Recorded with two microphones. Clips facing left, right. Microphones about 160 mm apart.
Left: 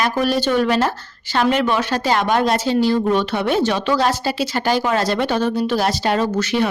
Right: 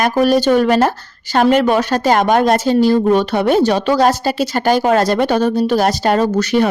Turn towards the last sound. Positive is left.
turn(degrees=-45)  # may be behind; listen again after turning